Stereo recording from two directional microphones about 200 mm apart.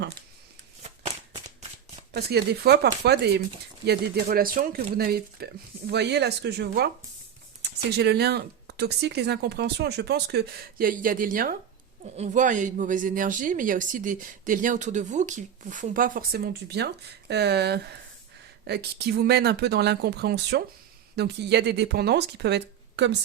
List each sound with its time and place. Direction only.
0.8 s shuffling cards: 30° right (ahead or behind)
2.1 s speech: 55° right (ahead or behind)